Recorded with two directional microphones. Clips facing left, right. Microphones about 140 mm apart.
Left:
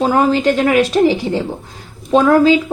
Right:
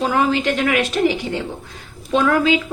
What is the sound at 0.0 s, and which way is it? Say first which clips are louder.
A woman's voice: left 5 dB; 35° left (ahead or behind).